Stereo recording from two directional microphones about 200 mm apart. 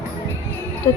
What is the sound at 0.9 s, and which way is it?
Music, 30° left (ahead or behind).